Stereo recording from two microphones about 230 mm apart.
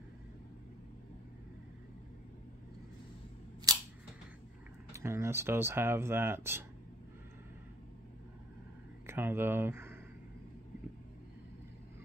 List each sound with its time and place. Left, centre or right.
3.7 s scissors: centre
4.9 s speech: centre
9.0 s speech: centre